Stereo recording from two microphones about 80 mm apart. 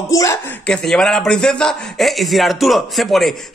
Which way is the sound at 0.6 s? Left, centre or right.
Centre.